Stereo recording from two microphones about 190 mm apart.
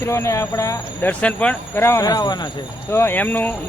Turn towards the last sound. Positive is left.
turn(degrees=10)  # may be behind; listen again after turning